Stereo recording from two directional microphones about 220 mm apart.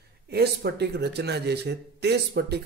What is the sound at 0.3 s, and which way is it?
Speech, 45° right (ahead or behind).